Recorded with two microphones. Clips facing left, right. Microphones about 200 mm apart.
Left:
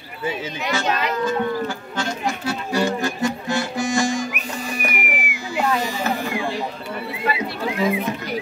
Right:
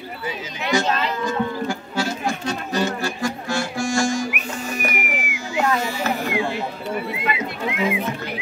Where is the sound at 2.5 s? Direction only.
15° left (ahead or behind).